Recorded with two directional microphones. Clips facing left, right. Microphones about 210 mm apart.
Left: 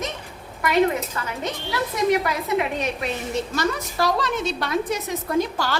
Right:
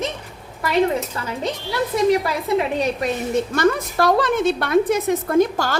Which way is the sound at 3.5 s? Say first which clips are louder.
Right 6 dB; 55° right (ahead or behind).